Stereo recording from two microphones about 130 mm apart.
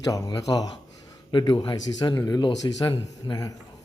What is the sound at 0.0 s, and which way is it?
Speech, 25° left (ahead or behind).